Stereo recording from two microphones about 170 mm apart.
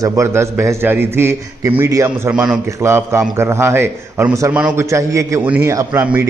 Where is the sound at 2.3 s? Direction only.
5° right (ahead or behind).